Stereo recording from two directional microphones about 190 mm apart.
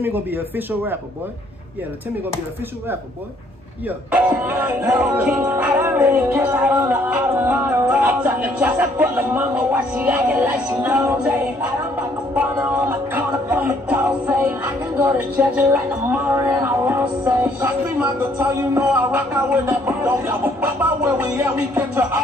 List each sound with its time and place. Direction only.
0.0 s music: 10° right (ahead or behind)
4.3 s music: 10° right (ahead or behind)
12.4 s music: 10° right (ahead or behind)